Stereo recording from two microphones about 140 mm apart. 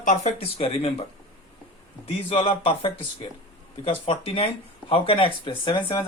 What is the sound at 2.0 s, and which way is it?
Speech, 40° left (ahead or behind).